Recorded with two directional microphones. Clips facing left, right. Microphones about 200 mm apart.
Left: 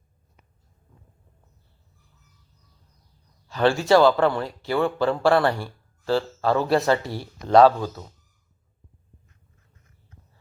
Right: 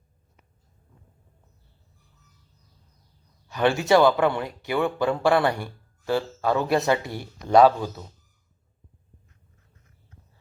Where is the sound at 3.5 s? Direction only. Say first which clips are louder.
Left 1 dB; 20° right (ahead or behind).